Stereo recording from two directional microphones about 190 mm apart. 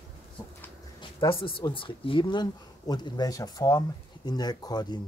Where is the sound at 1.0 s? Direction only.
15° left (ahead or behind).